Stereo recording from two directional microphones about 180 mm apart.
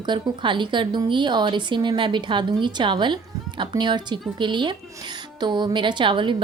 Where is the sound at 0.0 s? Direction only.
25° right (ahead or behind).